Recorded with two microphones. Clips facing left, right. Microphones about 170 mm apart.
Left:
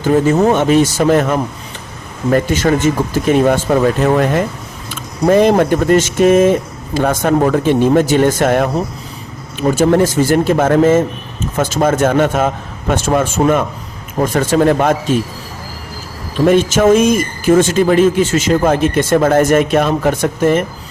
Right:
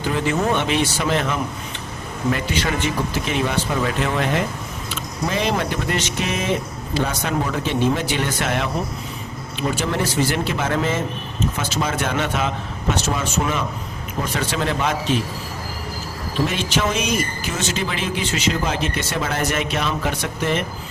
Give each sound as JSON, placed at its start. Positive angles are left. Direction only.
{"t": 0.0, "sound": "speech", "side_deg": 45}
{"t": 16.5, "sound": "speech", "side_deg": 45}